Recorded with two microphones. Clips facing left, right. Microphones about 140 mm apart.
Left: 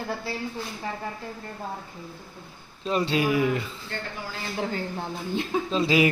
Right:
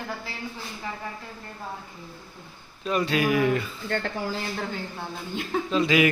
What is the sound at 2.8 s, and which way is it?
Speech, 30° left (ahead or behind).